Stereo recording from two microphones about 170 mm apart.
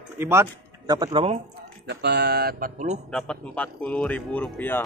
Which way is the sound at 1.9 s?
80° right.